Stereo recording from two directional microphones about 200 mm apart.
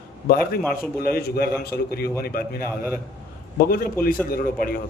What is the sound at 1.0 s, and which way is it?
A man's voice, 50° left (ahead or behind).